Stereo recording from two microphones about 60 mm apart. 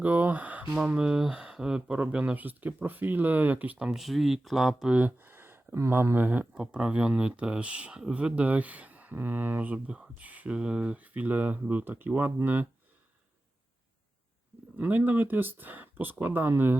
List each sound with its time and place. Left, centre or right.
0.0 s speech: right
0.8 s speech: centre; by 3.8 s right
3.9 s speech: centre
4.9 s a sound: right
5.9 s speech: right
6.5 s speech: centre; by 12.3 s right
14.8 s speech: right